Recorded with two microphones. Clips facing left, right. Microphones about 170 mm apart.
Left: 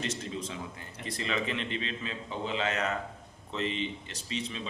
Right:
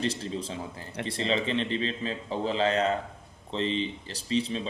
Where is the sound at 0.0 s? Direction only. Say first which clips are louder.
Right 4 dB; 30° right (ahead or behind).